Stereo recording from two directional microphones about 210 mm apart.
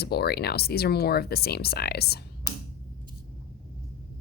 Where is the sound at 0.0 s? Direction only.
50° left (ahead or behind).